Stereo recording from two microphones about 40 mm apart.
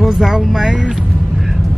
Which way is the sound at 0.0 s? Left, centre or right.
Centre.